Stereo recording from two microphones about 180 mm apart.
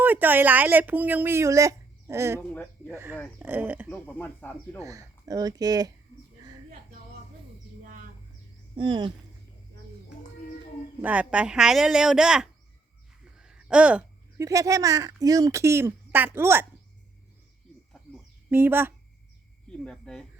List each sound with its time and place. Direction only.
0.0 s speech: 10° right (ahead or behind)
2.4 s speech: 10° left (ahead or behind)
2.9 s speech: 15° right (ahead or behind)
3.8 s speech: 5° left (ahead or behind)
4.8 s speech: 20° right (ahead or behind)
8.7 s speech: 25° right (ahead or behind)
11.0 s speech: 10° right (ahead or behind)
13.2 s a sound: 5° right (ahead or behind)
14.4 s speech: 20° right (ahead or behind)
18.5 s speech: 10° right (ahead or behind)
19.7 s speech: 5° left (ahead or behind)